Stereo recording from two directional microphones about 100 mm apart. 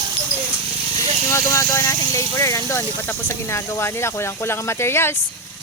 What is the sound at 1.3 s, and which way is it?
Speech, 30° left (ahead or behind).